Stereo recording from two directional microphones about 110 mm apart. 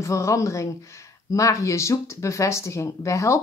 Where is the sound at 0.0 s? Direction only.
30° left (ahead or behind).